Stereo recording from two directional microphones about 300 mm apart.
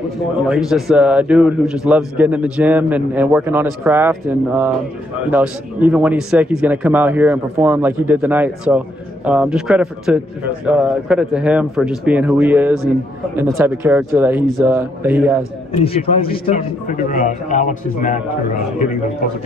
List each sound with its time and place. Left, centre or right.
0.5 s a man's voice: centre
15.8 s a man's voice: centre